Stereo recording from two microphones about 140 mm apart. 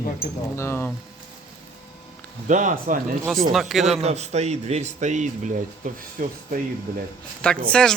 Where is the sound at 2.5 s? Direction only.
65° right (ahead or behind).